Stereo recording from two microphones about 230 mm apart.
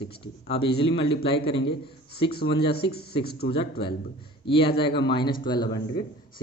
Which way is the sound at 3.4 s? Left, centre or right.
Left.